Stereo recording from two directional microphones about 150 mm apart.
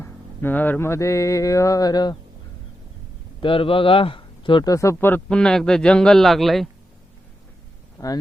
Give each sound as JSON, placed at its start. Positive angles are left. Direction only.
{"t": 0.0, "sound": "mantra", "side_deg": 15}
{"t": 3.4, "sound": "a man's voice", "side_deg": 35}
{"t": 4.7, "sound": "speech", "side_deg": 20}
{"t": 7.9, "sound": "speech", "side_deg": 25}